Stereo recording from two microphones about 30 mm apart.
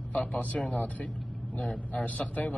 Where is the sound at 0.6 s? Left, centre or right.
Left.